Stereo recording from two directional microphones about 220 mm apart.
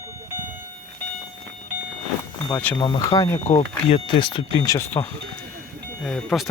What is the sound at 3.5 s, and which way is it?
Speech, 30° left (ahead or behind).